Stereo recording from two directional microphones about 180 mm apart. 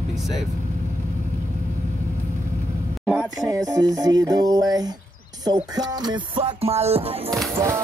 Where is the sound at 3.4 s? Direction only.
20° right (ahead or behind).